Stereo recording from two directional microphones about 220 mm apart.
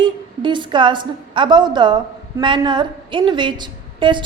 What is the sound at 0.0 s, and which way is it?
A woman's voice, 20° right (ahead or behind).